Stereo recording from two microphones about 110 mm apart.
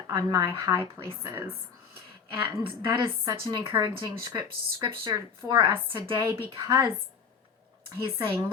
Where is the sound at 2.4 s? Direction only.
35° right (ahead or behind).